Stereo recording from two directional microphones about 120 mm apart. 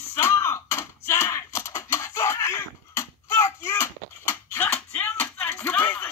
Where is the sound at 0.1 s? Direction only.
20° left (ahead or behind).